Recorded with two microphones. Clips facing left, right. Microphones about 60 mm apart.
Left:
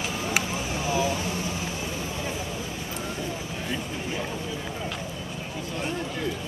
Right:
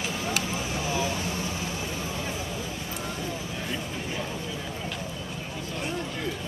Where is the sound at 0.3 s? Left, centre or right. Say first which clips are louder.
Left 3 dB; left.